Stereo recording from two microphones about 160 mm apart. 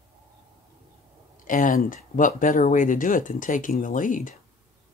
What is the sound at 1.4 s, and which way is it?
Speech, 55° left (ahead or behind).